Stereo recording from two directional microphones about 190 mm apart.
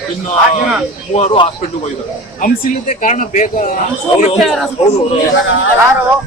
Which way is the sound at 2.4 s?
50° left (ahead or behind).